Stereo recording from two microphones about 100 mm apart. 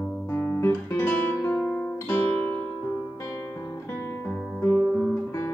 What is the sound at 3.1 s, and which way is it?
Guitar, 30° left (ahead or behind).